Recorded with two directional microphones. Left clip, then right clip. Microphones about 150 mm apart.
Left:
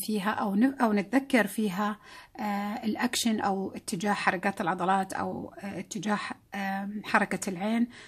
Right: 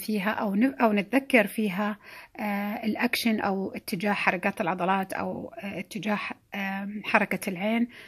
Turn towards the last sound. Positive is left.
turn(degrees=-10)  # may be behind; listen again after turning